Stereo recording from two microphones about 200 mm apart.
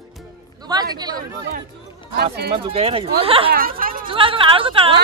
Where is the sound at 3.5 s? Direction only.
45° right (ahead or behind).